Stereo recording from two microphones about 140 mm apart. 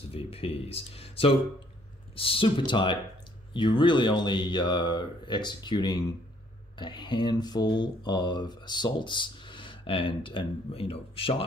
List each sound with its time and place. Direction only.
0.1 s speech: 45° left (ahead or behind)